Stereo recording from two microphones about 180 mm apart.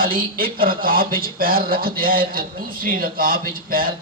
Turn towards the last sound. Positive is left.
turn(degrees=-55)  # may be behind; listen again after turning